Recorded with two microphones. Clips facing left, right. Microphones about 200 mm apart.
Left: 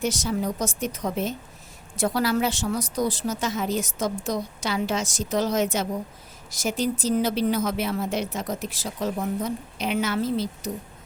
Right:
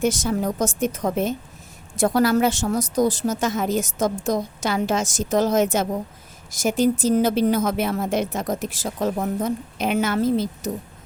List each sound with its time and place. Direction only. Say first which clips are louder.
0.0 s a woman's voice: right 4 dB; 50° right (ahead or behind)